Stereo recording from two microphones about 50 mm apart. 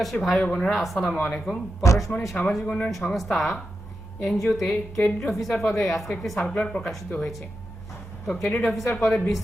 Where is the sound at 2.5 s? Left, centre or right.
Centre.